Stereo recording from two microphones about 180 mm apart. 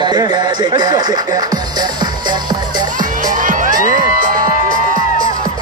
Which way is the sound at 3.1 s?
45° right (ahead or behind).